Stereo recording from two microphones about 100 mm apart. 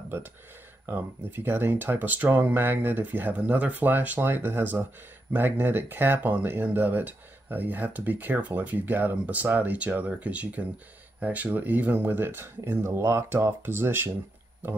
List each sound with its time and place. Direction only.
0.8 s speech: 20° right (ahead or behind)